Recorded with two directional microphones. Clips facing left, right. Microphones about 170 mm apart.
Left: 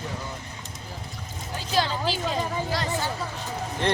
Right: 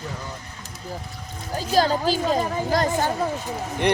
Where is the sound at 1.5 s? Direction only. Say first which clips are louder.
Right 6 dB; 40° right (ahead or behind).